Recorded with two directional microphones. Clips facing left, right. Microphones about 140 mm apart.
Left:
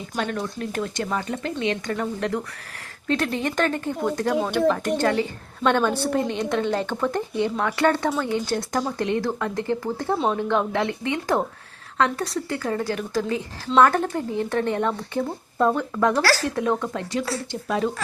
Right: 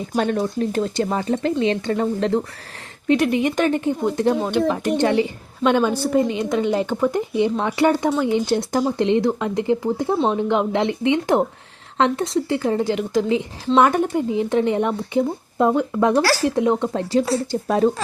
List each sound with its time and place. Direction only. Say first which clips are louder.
0.2 s speech: right 7 dB; 35° right (ahead or behind)
3.1 s speech: right 6 dB; 15° right (ahead or behind)
4.6 s speech: right 1 dB; 5° right (ahead or behind)
4.9 s speech: right 4 dB; 20° right (ahead or behind)
16.9 s speech: right 7 dB; 30° right (ahead or behind)
17.5 s speech: right 6 dB; 40° right (ahead or behind)